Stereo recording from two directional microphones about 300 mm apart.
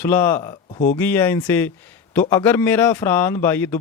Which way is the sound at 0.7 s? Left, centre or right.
Left.